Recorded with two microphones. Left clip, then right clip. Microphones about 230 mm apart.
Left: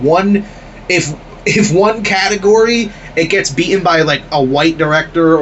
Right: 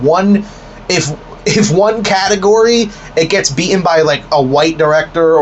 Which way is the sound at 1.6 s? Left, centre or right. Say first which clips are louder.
Right 1 dB; centre.